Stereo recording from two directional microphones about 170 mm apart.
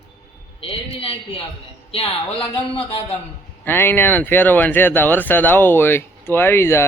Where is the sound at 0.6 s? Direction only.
35° left (ahead or behind).